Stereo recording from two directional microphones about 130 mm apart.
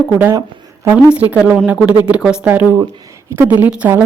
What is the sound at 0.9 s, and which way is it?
Speech, 10° right (ahead or behind).